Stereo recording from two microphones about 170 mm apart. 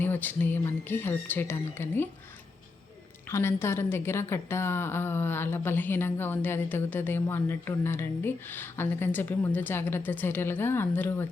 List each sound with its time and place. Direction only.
0.0 s a woman's voice: 10° left (ahead or behind)
3.2 s a woman's voice: 15° left (ahead or behind)